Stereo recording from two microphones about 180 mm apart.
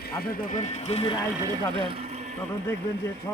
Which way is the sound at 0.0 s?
55° left (ahead or behind).